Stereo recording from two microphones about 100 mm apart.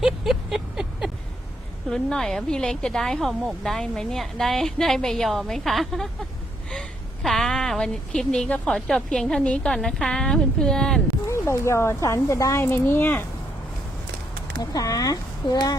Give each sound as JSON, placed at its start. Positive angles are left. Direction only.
{"t": 0.0, "sound": "a sound", "side_deg": -5}
{"t": 1.9, "sound": "a woman's voice", "side_deg": 5}
{"t": 11.3, "sound": "speech", "side_deg": 30}
{"t": 14.6, "sound": "speech", "side_deg": 40}